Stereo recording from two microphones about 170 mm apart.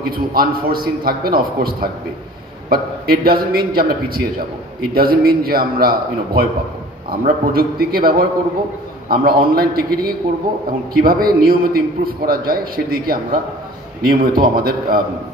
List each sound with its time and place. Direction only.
0.0 s a man's voice: 60° right (ahead or behind)